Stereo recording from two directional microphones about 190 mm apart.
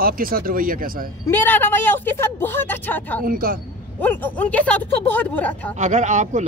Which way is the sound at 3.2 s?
45° right (ahead or behind).